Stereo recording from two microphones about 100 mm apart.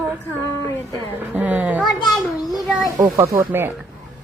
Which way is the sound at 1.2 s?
20° right (ahead or behind).